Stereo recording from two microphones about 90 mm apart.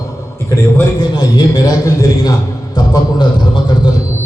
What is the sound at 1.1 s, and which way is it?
A man's voice, 50° left (ahead or behind).